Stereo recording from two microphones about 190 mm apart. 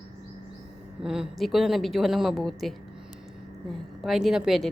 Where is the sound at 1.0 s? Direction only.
5° right (ahead or behind).